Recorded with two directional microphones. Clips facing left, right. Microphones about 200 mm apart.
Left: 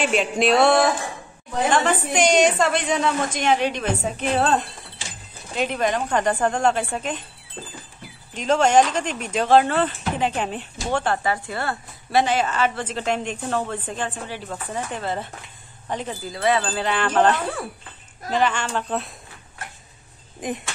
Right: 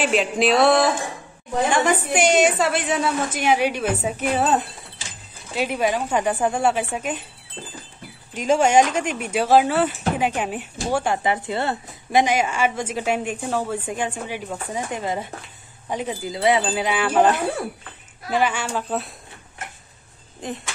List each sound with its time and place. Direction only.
0.0 s music: centre (ahead or behind)
1.7 s a woman's voice: 10° right (ahead or behind)
8.4 s a woman's voice: 10° right (ahead or behind)
11.2 s a woman's voice: 20° right (ahead or behind); by 19.1 s 5° right (ahead or behind)
19.6 s a sound: 20° right (ahead or behind)
20.4 s speech: 15° left (ahead or behind)